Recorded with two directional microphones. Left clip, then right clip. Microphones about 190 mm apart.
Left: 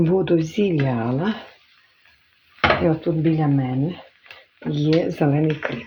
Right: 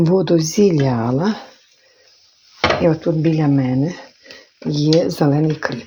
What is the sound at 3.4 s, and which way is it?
Speech, 40° right (ahead or behind).